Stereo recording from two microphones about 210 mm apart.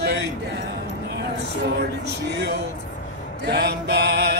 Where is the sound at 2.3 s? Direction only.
50° right (ahead or behind).